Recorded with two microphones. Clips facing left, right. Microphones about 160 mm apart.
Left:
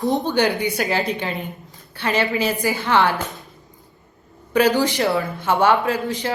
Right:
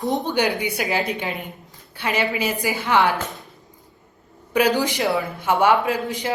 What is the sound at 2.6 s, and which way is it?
Speech, centre (ahead or behind).